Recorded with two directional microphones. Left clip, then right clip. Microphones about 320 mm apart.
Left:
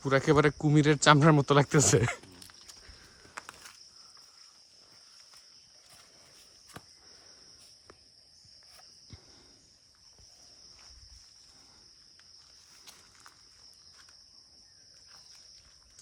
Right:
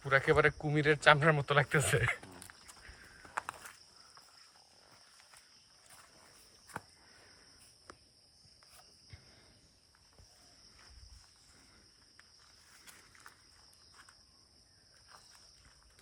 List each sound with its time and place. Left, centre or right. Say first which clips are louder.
0.0 s speech: left 3 dB; left